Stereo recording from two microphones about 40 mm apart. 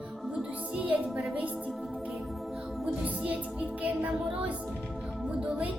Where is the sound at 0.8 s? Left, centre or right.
Right.